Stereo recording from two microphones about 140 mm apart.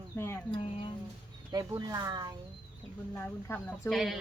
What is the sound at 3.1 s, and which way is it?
Speech, 10° left (ahead or behind).